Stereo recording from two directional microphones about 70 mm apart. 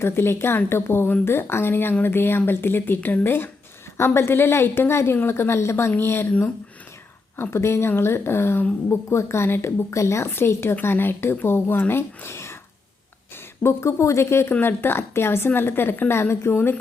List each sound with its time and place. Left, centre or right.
0.0 s a woman's voice: left
7.5 s a woman's voice: left
10.2 s a woman's voice: left
13.6 s a woman's voice: left